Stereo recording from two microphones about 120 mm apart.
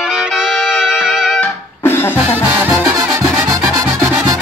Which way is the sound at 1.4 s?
20° left (ahead or behind).